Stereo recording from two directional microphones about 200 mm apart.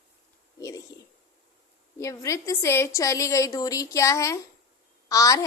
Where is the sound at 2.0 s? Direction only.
15° left (ahead or behind).